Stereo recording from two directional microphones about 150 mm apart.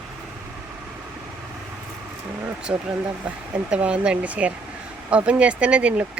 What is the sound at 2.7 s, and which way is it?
Speech, 10° right (ahead or behind).